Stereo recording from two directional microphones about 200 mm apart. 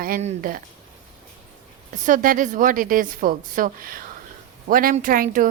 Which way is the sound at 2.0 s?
40° right (ahead or behind).